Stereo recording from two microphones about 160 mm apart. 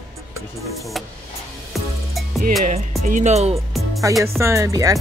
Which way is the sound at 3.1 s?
50° right (ahead or behind).